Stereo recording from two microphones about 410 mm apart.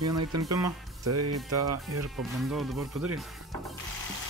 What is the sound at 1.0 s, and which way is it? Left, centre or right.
Speech, right.